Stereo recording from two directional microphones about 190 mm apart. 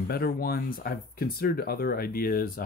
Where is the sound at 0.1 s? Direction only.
55° left (ahead or behind).